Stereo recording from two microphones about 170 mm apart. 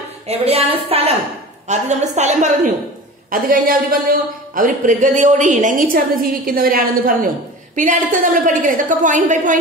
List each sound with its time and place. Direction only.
0.3 s a woman's voice: 35° right (ahead or behind)
3.3 s a man's voice: 55° right (ahead or behind)